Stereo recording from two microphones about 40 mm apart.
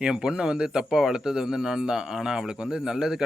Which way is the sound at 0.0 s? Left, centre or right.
Right.